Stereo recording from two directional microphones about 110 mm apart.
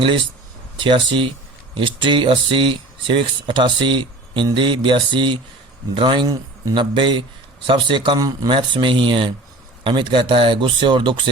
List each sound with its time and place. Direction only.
0.8 s speech: 50° right (ahead or behind)
6.7 s speech: 50° right (ahead or behind)